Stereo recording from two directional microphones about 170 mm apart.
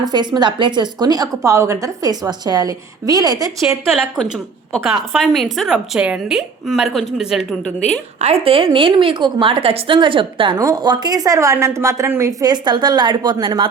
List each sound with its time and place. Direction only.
0.0 s a woman's voice: 25° right (ahead or behind)
4.0 s a woman's voice: 5° right (ahead or behind)
8.2 s a woman's voice: 35° right (ahead or behind)